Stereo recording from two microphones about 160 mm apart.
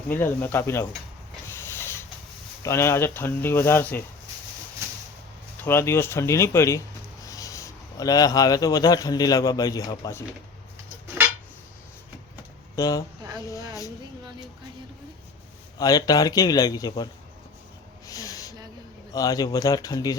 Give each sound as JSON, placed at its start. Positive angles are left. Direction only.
{"t": 0.1, "sound": "speech", "side_deg": 15}
{"t": 1.5, "sound": "a sound", "side_deg": 15}
{"t": 2.6, "sound": "speech", "side_deg": 15}
{"t": 5.6, "sound": "speech", "side_deg": 15}
{"t": 12.7, "sound": "a man's voice", "side_deg": 20}
{"t": 15.8, "sound": "a man's voice", "side_deg": 25}
{"t": 18.0, "sound": "snort", "side_deg": 20}
{"t": 19.1, "sound": "a man's voice", "side_deg": 20}